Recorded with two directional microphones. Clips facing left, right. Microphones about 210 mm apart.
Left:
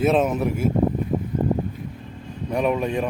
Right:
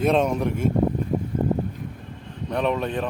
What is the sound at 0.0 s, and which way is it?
Speech, 5° left (ahead or behind).